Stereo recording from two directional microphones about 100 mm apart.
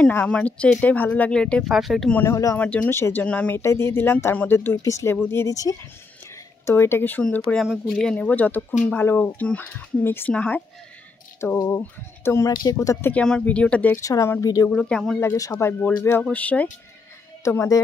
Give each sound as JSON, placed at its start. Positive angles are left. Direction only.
{"t": 0.1, "sound": "speech", "side_deg": 15}
{"t": 2.2, "sound": "speech", "side_deg": 35}
{"t": 2.5, "sound": "speech", "side_deg": 15}
{"t": 3.5, "sound": "speech", "side_deg": 25}
{"t": 4.8, "sound": "speech", "side_deg": 30}
{"t": 7.5, "sound": "speech", "side_deg": 10}
{"t": 11.5, "sound": "speech", "side_deg": 35}
{"t": 11.8, "sound": "speech", "side_deg": 20}
{"t": 12.4, "sound": "speech", "side_deg": 35}
{"t": 13.1, "sound": "speech", "side_deg": 10}
{"t": 13.9, "sound": "speech", "side_deg": 30}
{"t": 14.7, "sound": "speech", "side_deg": 10}
{"t": 15.5, "sound": "speech", "side_deg": 20}
{"t": 17.5, "sound": "speech", "side_deg": 30}